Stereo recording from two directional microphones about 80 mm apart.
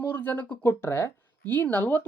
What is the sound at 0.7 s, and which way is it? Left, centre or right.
Speech, left.